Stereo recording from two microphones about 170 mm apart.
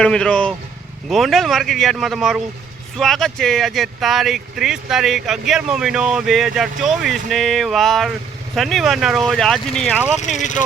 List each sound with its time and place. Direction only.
0.0 s speech: 5° left (ahead or behind)
10.3 s speech: 45° left (ahead or behind)